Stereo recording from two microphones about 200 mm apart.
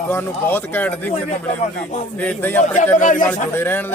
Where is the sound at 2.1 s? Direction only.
5° left (ahead or behind).